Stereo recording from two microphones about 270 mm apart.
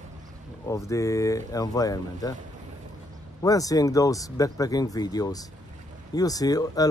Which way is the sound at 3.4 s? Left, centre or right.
Centre.